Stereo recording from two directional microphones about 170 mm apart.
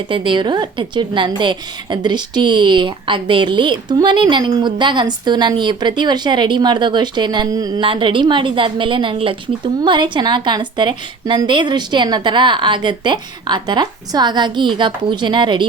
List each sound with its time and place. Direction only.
0.1 s a woman's voice: 30° right (ahead or behind)